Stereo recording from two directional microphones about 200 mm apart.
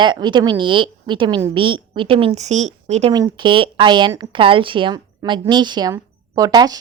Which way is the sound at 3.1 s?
20° right (ahead or behind).